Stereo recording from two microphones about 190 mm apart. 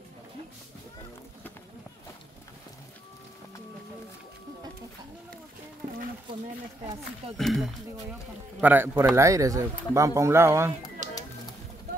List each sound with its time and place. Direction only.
7.3 s speech: centre (ahead or behind)
8.5 s speech: 10° right (ahead or behind)
11.0 s music: 40° right (ahead or behind)